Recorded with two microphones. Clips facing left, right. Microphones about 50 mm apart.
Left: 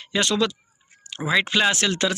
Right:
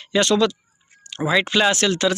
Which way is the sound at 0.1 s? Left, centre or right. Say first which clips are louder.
Right 4 dB; centre.